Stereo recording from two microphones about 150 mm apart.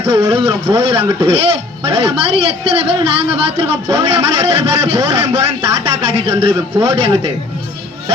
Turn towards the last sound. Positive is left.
turn(degrees=-35)  # may be behind; listen again after turning